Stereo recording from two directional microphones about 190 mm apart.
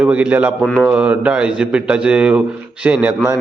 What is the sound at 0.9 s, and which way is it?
A man's voice, 5° right (ahead or behind).